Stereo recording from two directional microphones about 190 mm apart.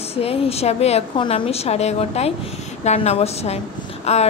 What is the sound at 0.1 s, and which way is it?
Speech, 30° left (ahead or behind).